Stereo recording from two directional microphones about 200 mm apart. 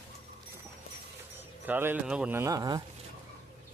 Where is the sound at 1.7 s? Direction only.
10° right (ahead or behind).